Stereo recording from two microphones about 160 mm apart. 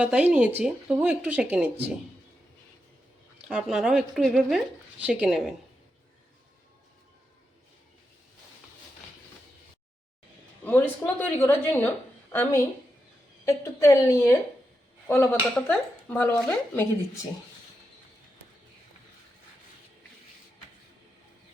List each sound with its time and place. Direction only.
0.0 s speech: 10° right (ahead or behind)
3.5 s speech: 5° right (ahead or behind)
10.6 s a woman's voice: 10° left (ahead or behind)